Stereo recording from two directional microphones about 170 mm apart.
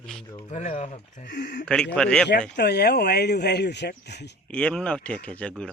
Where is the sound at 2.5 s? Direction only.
75° left (ahead or behind).